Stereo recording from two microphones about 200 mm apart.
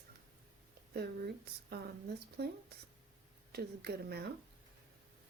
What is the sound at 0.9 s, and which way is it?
Speech, 50° right (ahead or behind).